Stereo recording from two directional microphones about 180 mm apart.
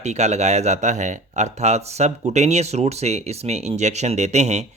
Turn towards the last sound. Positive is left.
turn(degrees=-40)  # may be behind; listen again after turning